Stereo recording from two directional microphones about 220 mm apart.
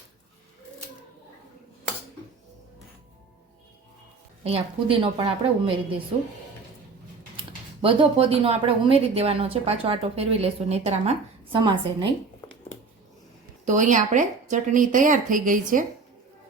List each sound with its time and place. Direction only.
4.4 s a woman's voice: 25° right (ahead or behind)
7.8 s a woman's voice: 25° right (ahead or behind)
13.7 s speech: 35° right (ahead or behind)